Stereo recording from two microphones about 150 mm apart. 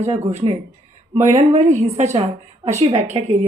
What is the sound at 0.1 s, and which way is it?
A woman's voice, 45° right (ahead or behind).